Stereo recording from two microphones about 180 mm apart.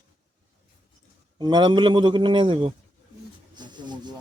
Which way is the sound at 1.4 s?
25° right (ahead or behind).